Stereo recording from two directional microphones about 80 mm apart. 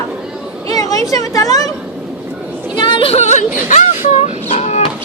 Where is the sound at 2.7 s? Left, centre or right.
Left.